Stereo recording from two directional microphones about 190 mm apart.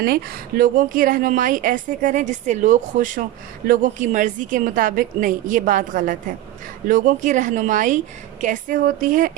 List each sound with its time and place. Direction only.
0.0 s a woman's voice: 50° right (ahead or behind)